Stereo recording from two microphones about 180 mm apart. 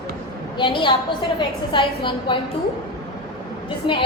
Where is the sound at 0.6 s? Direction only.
25° left (ahead or behind).